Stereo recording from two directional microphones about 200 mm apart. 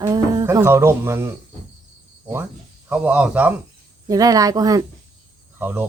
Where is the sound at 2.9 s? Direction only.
5° right (ahead or behind).